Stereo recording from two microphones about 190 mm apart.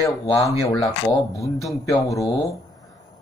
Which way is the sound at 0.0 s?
15° left (ahead or behind).